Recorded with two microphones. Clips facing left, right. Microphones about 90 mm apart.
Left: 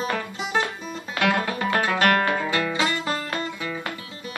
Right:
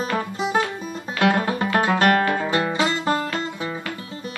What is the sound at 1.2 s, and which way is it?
Music, 30° right (ahead or behind).